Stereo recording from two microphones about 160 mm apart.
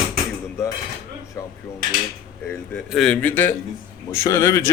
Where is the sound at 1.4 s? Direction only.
20° left (ahead or behind).